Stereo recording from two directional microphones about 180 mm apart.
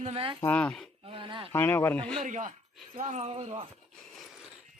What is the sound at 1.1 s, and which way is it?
Speech, 30° right (ahead or behind).